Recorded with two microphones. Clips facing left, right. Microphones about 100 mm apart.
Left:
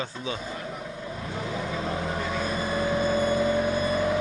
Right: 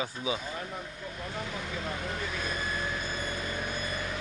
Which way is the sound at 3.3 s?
30° left (ahead or behind).